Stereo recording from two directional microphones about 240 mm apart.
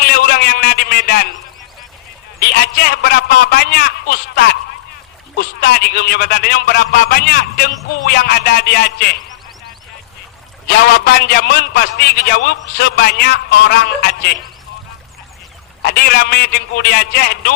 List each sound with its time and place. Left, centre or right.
0.0 s a sound: left
2.5 s a man's voice: left
10.7 s a man's voice: left
15.8 s a man's voice: left